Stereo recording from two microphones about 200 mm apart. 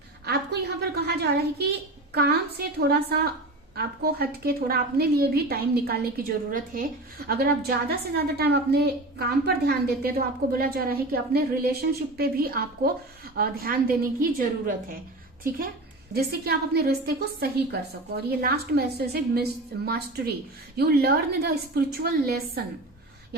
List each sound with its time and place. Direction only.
0.3 s a woman's voice: 55° right (ahead or behind)
16.1 s a woman's voice: 50° right (ahead or behind)
18.3 s a woman's voice: 50° right (ahead or behind)